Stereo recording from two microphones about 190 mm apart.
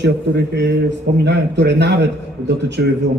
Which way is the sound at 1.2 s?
65° right (ahead or behind).